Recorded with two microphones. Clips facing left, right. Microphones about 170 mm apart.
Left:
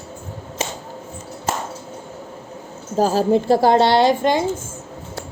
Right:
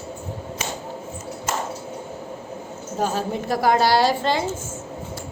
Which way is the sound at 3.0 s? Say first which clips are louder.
Left 8 dB; 35° left (ahead or behind).